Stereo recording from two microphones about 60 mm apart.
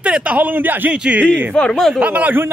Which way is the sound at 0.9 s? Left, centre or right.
Centre.